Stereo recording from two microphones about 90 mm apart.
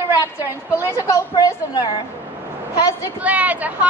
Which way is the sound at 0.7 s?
30° left (ahead or behind).